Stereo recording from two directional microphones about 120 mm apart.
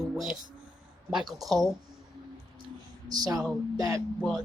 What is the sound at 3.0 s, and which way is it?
Speech, 35° right (ahead or behind).